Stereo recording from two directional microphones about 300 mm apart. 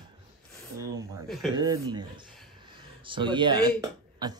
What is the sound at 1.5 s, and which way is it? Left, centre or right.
Speech, centre.